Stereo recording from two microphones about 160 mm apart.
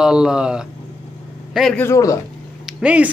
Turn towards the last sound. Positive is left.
turn(degrees=-5)  # may be behind; listen again after turning